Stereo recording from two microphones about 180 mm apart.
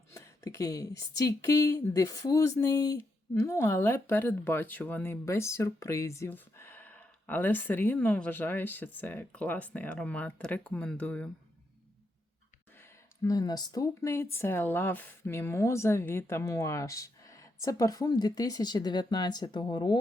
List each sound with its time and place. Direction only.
0.1 s speech: 15° left (ahead or behind)
12.8 s speech: 20° left (ahead or behind)